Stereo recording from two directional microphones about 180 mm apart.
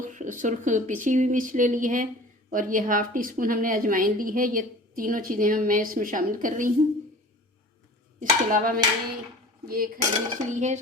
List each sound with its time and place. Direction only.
0.0 s a woman's voice: 45° right (ahead or behind)
8.2 s a woman's voice: 50° right (ahead or behind)